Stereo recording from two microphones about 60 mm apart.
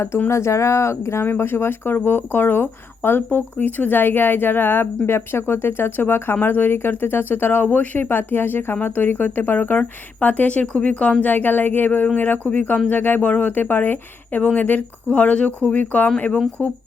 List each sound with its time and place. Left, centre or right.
0.3 s speech: left
1.2 s speech: left